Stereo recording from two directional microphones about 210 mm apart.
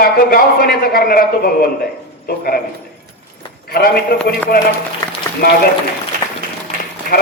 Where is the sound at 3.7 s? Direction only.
45° left (ahead or behind).